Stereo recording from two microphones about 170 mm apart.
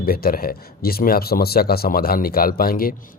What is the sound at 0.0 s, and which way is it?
A man's voice, 60° left (ahead or behind).